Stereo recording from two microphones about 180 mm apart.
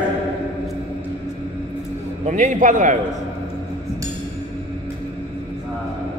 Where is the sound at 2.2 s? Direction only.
45° right (ahead or behind).